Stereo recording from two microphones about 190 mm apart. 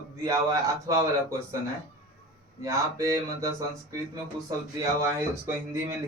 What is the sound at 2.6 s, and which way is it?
A man's voice, 15° right (ahead or behind).